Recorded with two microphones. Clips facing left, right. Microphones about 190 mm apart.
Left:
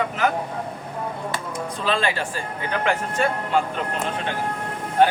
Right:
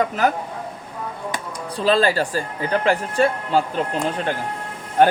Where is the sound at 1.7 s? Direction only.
35° right (ahead or behind).